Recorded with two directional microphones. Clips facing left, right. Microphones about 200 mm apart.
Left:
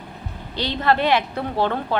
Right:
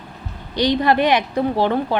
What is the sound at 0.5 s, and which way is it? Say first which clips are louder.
Speech: right 5 dB; 15° right (ahead or behind).